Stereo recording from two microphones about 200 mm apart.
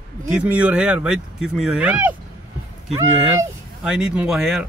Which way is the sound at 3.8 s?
5° right (ahead or behind).